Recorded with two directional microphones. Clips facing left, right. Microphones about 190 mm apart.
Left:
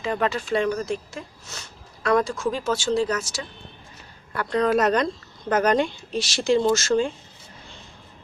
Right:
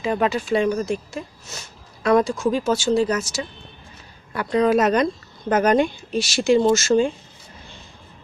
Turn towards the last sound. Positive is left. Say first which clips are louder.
# right 3 dB
turn(degrees=-10)  # may be behind; listen again after turning